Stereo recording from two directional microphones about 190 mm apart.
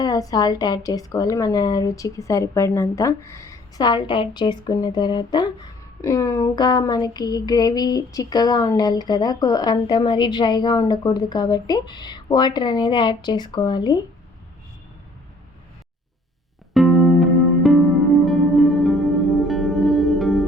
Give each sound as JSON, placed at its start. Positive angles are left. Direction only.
{"t": 0.0, "sound": "a woman's voice", "side_deg": 20}
{"t": 16.7, "sound": "music", "side_deg": 0}